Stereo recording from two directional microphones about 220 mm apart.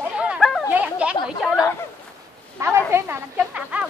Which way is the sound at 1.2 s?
Centre (ahead or behind).